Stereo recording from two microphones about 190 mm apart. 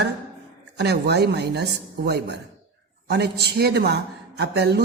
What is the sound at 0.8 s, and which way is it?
A woman's voice, 60° right (ahead or behind).